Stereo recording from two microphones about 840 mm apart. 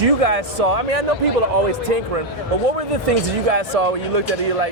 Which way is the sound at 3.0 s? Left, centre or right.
Right.